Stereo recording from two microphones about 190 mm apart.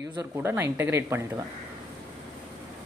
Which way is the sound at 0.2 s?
10° right (ahead or behind).